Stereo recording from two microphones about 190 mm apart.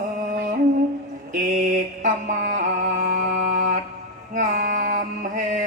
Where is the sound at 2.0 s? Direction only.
45° right (ahead or behind).